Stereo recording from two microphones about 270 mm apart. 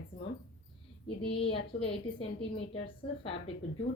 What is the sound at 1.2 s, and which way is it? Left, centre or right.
Speech, centre.